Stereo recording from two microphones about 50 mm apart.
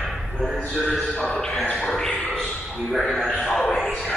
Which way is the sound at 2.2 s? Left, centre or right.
Centre.